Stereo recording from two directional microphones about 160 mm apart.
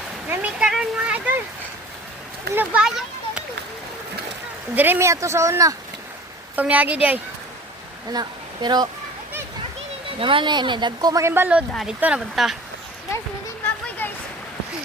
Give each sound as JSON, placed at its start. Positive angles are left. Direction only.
{"t": 0.3, "sound": "a sound", "side_deg": -5}
{"t": 2.6, "sound": "speech", "side_deg": -5}
{"t": 4.7, "sound": "speech", "side_deg": -10}
{"t": 6.6, "sound": "speech", "side_deg": -10}
{"t": 8.1, "sound": "speech", "side_deg": -25}
{"t": 10.2, "sound": "speech", "side_deg": -30}
{"t": 14.0, "sound": "a sound", "side_deg": 10}